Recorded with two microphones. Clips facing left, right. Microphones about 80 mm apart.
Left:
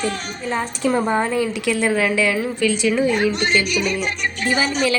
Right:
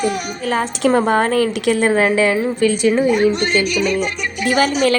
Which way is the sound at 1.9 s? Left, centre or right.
Right.